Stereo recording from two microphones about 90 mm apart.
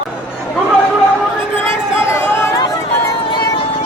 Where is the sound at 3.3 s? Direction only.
65° left (ahead or behind); by 3.8 s 80° left.